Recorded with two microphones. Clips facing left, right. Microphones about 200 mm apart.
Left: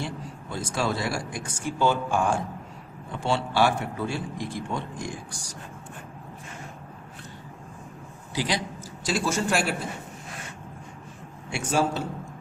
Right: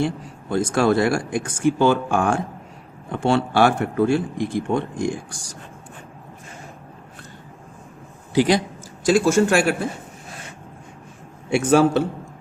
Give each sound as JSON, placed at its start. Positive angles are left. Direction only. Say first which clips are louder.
{"t": 0.5, "sound": "a man's voice", "louder": "right 10 dB", "side_deg": -50}
{"t": 3.1, "sound": "a man's voice", "louder": "right 7 dB", "side_deg": -50}
{"t": 8.3, "sound": "a man's voice", "louder": "right 11 dB", "side_deg": -55}
{"t": 11.5, "sound": "speech", "louder": "right 10 dB", "side_deg": -65}